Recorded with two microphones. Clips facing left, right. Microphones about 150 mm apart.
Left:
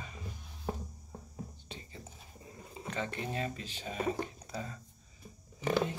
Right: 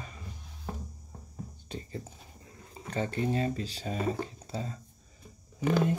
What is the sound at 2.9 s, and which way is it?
Speech, 35° right (ahead or behind).